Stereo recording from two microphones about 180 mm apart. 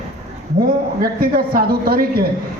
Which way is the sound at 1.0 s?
55° right (ahead or behind).